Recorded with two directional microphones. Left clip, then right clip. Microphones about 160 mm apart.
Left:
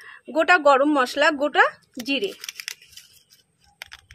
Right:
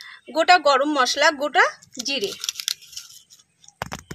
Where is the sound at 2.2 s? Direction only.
5° left (ahead or behind).